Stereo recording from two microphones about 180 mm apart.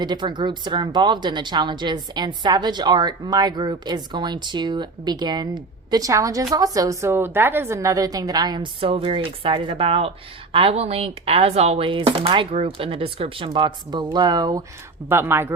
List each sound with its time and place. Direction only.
0.0 s speech: 25° right (ahead or behind)